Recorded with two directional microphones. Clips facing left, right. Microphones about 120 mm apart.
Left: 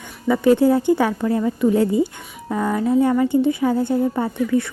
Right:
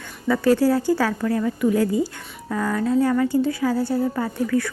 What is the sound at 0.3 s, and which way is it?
A woman's voice, 20° left (ahead or behind).